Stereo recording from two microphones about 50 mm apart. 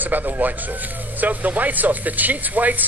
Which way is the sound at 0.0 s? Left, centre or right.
Right.